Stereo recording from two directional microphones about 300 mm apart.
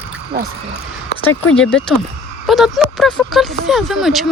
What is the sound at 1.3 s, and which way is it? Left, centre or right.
Speech, centre.